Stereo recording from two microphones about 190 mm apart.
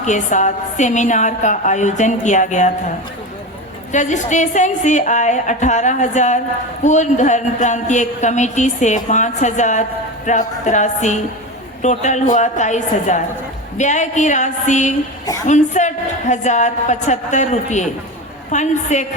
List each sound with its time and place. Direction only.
0.0 s speech: 40° left (ahead or behind)
3.9 s speech: 40° left (ahead or behind)